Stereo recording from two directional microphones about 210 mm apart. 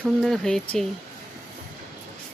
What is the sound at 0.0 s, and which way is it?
Speech, centre (ahead or behind).